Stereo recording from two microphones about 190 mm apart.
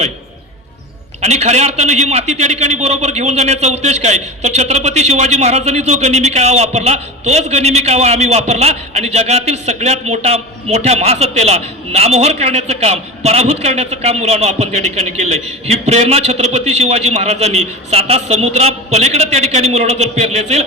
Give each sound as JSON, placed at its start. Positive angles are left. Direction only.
{"t": 1.2, "sound": "a man's voice", "side_deg": -35}